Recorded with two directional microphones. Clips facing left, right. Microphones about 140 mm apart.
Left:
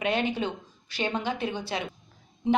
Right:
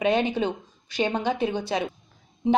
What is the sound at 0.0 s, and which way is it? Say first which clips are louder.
A woman's voice: right 4 dB; 20° right (ahead or behind).